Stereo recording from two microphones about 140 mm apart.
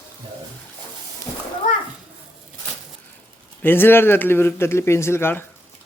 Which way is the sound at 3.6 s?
15° left (ahead or behind).